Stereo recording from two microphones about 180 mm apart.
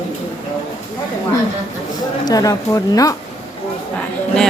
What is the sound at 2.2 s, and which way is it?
Speech, 20° left (ahead or behind).